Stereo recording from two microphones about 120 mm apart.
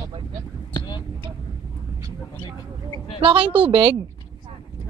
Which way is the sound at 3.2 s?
45° right (ahead or behind).